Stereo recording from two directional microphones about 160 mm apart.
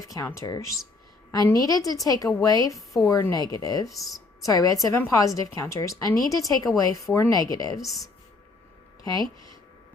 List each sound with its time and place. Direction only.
0.0 s a woman's voice: 20° left (ahead or behind)
7.8 s speech: centre (ahead or behind)